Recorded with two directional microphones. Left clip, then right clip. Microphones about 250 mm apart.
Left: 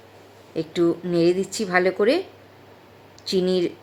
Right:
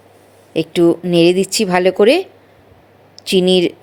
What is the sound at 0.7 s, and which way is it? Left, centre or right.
Speech, right.